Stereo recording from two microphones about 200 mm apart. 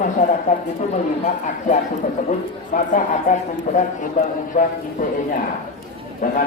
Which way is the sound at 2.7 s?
40° left (ahead or behind).